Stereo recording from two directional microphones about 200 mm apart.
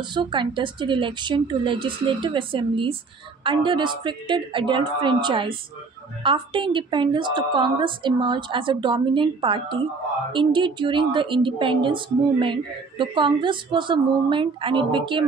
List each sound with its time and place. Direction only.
0.1 s a woman's voice: 25° right (ahead or behind)